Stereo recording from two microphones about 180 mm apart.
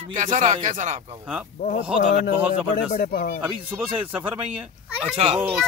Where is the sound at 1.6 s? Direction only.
40° left (ahead or behind).